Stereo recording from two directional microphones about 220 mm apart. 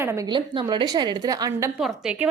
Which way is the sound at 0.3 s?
20° right (ahead or behind).